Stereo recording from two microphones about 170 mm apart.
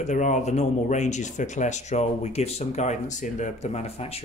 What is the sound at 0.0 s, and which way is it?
Speech, 45° left (ahead or behind).